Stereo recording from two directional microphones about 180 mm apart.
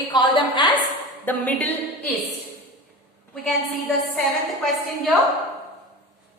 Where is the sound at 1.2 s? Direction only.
10° left (ahead or behind).